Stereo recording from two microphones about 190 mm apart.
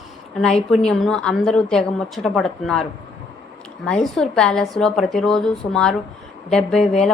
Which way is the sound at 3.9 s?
5° left (ahead or behind).